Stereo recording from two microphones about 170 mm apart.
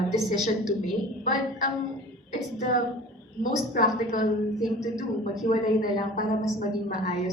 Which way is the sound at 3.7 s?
50° left (ahead or behind).